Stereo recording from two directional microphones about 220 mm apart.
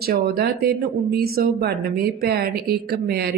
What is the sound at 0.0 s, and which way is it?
Speech, 45° right (ahead or behind).